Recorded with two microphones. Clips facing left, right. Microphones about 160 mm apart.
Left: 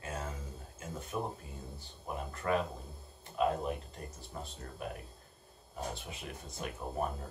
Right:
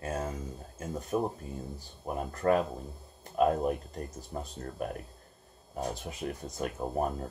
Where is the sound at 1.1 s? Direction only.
40° right (ahead or behind).